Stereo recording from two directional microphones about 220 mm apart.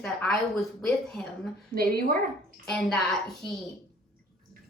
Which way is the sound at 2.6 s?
5° left (ahead or behind).